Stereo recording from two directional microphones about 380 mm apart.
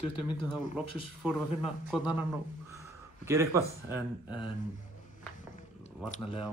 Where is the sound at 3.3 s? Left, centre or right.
Centre.